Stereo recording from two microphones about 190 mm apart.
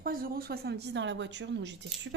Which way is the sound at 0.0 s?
50° right (ahead or behind).